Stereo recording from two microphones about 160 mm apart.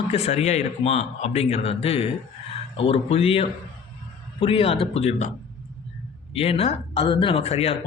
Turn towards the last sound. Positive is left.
turn(degrees=40)  # may be behind; listen again after turning